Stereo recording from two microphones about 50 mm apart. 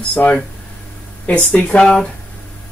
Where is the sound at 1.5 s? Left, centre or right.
Left.